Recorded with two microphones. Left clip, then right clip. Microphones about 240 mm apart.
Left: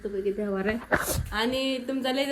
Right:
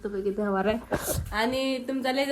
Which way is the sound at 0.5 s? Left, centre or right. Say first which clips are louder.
Right 3 dB; centre.